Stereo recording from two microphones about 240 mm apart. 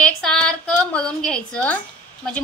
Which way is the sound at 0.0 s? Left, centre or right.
Centre.